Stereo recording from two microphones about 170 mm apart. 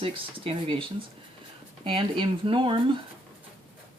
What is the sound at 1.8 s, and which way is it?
Speech, 30° right (ahead or behind).